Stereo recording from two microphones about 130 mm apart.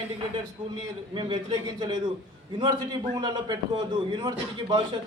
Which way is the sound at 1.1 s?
35° right (ahead or behind).